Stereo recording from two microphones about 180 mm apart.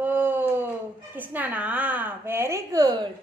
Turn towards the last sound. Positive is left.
turn(degrees=-20)  # may be behind; listen again after turning